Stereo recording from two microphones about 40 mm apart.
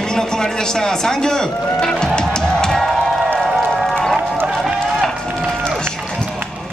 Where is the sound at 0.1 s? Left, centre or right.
Centre.